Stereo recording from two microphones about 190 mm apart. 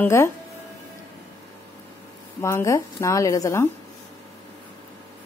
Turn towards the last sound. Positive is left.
turn(degrees=15)  # may be behind; listen again after turning